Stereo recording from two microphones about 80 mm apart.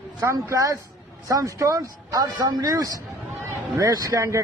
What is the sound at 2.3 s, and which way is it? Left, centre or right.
A man's voice, right.